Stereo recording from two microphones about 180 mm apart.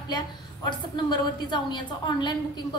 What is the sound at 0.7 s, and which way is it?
A woman's voice, 25° left (ahead or behind).